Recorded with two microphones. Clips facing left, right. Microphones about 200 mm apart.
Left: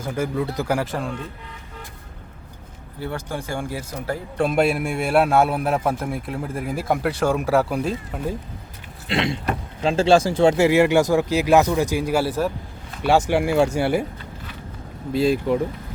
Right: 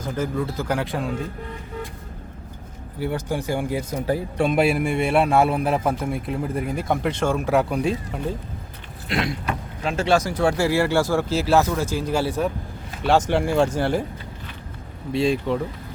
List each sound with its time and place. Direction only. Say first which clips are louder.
0.0 s speech: left 1 dB; 10° left (ahead or behind)
3.0 s speech: right 3 dB; 15° right (ahead or behind)
4.4 s a man's voice: left 1 dB; centre (ahead or behind)
9.0 s vehicle: left 2 dB; 25° left (ahead or behind)
9.8 s speech: left 4 dB; 30° left (ahead or behind); by 14.0 s 10° left (ahead or behind)
15.1 s a man's voice: left 2 dB; centre (ahead or behind)